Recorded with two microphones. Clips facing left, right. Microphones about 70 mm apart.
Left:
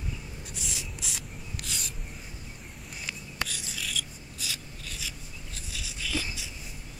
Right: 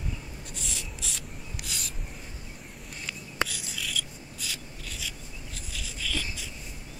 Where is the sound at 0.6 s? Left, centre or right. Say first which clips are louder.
Even; centre.